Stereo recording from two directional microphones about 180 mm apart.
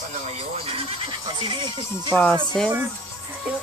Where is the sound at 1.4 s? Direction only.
25° right (ahead or behind).